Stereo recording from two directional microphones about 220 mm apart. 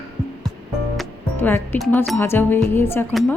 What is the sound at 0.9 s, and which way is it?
Speech, 10° left (ahead or behind).